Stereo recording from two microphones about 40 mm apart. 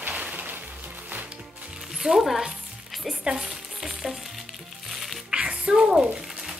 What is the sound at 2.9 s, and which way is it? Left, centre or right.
Frying, centre.